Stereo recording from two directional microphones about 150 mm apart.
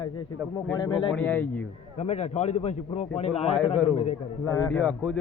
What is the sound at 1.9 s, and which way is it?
A man's voice, 45° left (ahead or behind).